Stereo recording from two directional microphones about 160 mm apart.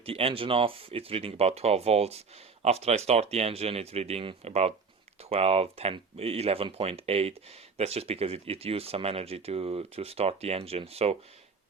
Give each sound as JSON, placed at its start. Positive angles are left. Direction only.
{"t": 0.0, "sound": "speech", "side_deg": -35}